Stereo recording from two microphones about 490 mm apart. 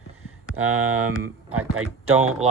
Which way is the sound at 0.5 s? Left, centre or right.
Right.